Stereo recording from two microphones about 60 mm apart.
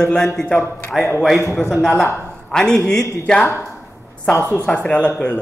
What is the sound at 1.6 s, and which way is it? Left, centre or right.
A man's voice, centre.